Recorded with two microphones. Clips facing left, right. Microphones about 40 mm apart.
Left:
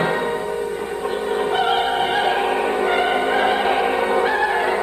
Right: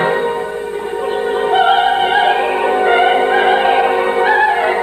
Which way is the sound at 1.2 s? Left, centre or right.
Right.